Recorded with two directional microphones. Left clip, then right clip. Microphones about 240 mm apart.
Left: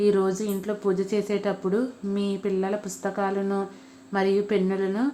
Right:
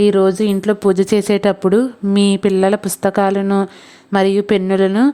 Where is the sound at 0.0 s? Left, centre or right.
Right.